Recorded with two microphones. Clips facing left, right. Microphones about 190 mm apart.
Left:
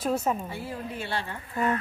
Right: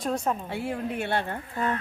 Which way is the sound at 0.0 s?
5° left (ahead or behind).